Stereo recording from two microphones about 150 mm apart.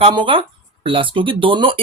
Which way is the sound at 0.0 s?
35° right (ahead or behind).